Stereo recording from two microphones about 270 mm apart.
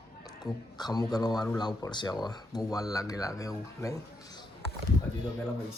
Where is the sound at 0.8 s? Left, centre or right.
Centre.